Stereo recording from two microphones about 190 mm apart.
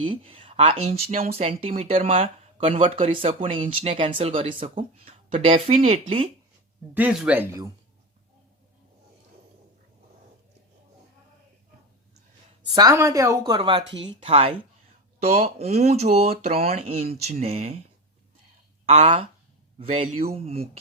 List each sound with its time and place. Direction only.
0.0 s speech: 30° right (ahead or behind)
3.1 s speech: 30° right (ahead or behind)
6.9 s speech: 5° right (ahead or behind)
12.7 s speech: 20° right (ahead or behind)
18.9 s speech: 35° right (ahead or behind)